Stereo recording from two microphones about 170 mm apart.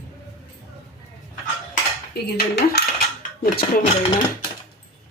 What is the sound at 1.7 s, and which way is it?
Cutlery, 70° left (ahead or behind).